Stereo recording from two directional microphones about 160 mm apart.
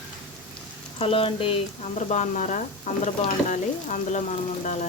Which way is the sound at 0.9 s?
35° left (ahead or behind).